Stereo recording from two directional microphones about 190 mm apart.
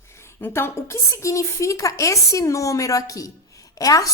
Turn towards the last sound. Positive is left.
turn(degrees=20)  # may be behind; listen again after turning